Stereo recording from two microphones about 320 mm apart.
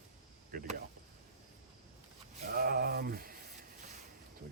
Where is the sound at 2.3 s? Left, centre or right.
Right.